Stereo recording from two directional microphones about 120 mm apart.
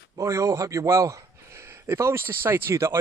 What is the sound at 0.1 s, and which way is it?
Speech, 25° right (ahead or behind).